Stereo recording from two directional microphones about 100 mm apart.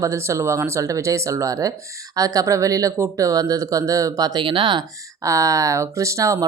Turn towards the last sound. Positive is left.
turn(degrees=-30)  # may be behind; listen again after turning